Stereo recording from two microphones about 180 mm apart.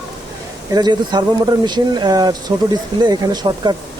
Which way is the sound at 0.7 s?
25° right (ahead or behind).